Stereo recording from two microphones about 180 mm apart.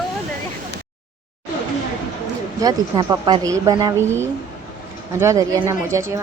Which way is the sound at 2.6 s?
20° right (ahead or behind).